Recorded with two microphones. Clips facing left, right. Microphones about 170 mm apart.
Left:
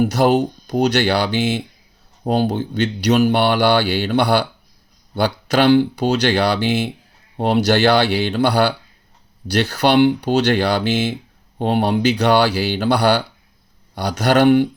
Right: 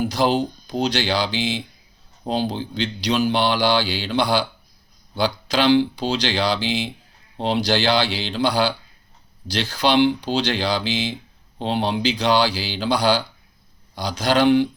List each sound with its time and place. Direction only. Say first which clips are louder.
0.0 s speech: left 5 dB; 60° left (ahead or behind)